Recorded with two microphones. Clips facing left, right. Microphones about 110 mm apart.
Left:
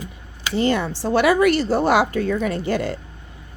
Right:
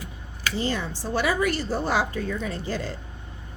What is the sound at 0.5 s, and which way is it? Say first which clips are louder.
Speech: left 9 dB; 65° left (ahead or behind).